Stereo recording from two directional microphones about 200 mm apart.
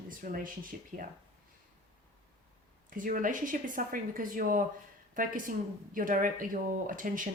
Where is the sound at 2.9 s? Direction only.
40° right (ahead or behind).